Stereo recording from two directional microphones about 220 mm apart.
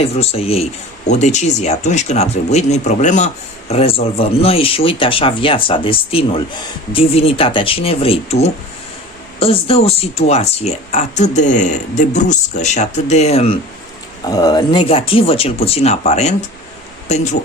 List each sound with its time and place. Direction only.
0.0 s speech: 25° left (ahead or behind)